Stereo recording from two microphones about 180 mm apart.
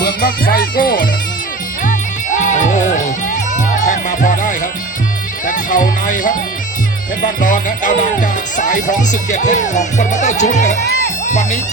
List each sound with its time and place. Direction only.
0.0 s speech: 55° left (ahead or behind)
1.8 s music: 45° left (ahead or behind)
7.2 s speech: 50° left (ahead or behind)